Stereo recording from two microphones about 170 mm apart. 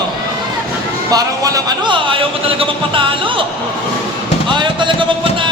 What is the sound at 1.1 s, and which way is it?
A man's voice, 20° right (ahead or behind).